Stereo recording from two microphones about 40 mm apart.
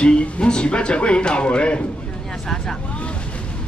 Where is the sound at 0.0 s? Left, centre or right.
Left.